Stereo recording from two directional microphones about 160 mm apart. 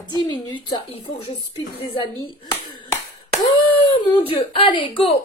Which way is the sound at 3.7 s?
35° left (ahead or behind).